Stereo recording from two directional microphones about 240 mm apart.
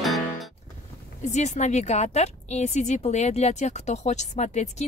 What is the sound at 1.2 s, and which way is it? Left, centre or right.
A woman's voice, left.